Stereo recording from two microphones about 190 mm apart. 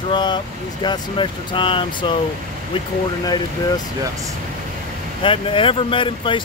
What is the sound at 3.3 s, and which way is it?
Speech, 20° left (ahead or behind).